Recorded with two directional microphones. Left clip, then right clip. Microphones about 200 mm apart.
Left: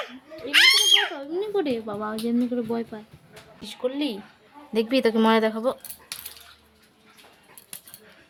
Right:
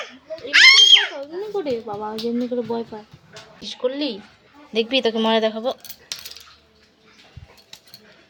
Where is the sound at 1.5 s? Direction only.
35° left (ahead or behind).